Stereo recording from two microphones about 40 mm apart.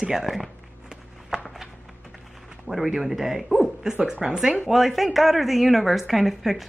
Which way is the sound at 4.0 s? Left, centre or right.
Right.